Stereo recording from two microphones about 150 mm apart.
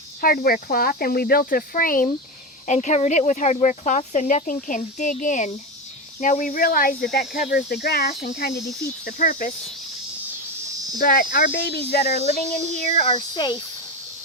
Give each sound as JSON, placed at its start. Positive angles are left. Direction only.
{"t": 0.2, "sound": "speech", "side_deg": 75}
{"t": 2.6, "sound": "speech", "side_deg": 50}
{"t": 9.0, "sound": "speech", "side_deg": 65}
{"t": 10.9, "sound": "speech", "side_deg": 70}
{"t": 12.5, "sound": "speech", "side_deg": 50}
{"t": 13.1, "sound": "speech", "side_deg": 30}